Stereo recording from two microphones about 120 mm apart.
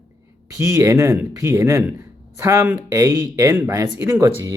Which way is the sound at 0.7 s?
25° right (ahead or behind).